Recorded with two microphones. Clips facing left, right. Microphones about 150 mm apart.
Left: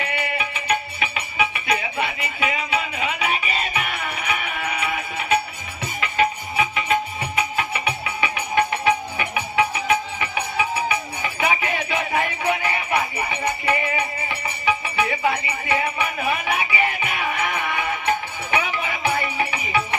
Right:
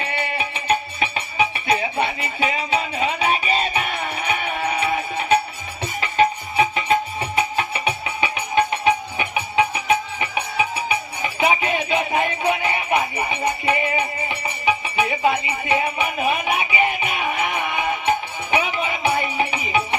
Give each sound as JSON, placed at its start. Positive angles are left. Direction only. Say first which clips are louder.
{"t": 0.0, "sound": "music", "louder": "right 1 dB", "side_deg": -30}